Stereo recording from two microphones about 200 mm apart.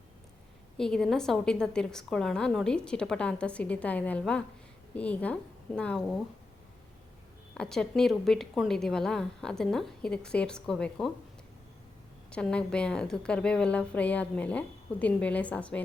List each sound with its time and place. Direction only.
0.8 s a woman's voice: 5° left (ahead or behind)
7.5 s a woman's voice: 5° left (ahead or behind)
12.3 s a woman's voice: 5° left (ahead or behind)